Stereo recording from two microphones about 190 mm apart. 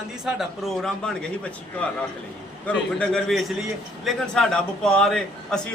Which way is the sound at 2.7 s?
5° left (ahead or behind).